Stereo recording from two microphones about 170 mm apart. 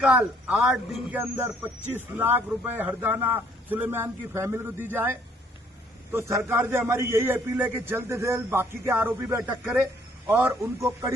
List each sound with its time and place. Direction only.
0.0 s a man's voice: 10° right (ahead or behind)